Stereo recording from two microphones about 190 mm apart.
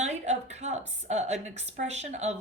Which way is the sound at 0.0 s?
35° right (ahead or behind).